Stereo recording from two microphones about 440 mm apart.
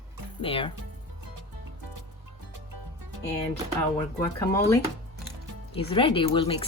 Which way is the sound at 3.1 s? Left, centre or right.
Right.